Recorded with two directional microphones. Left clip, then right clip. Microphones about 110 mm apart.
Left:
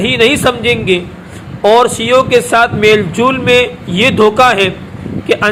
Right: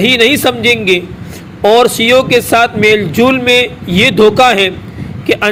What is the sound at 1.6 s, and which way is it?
Speech, 35° right (ahead or behind).